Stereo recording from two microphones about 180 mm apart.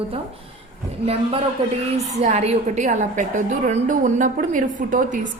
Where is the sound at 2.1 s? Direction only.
35° right (ahead or behind).